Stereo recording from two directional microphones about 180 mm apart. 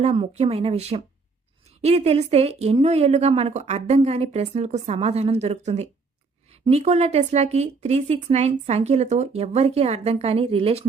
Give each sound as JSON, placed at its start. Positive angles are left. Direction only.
{"t": 0.0, "sound": "a woman's voice", "side_deg": -35}